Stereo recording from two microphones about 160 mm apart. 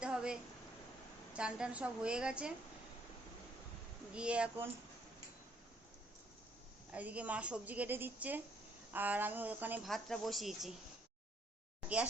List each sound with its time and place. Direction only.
0.0 s a sound: 5° right (ahead or behind)
1.3 s a woman's voice: 5° right (ahead or behind)
4.1 s a woman's voice: 5° right (ahead or behind)
6.9 s a woman's voice: 10° right (ahead or behind)
9.8 s a woman's voice: centre (ahead or behind)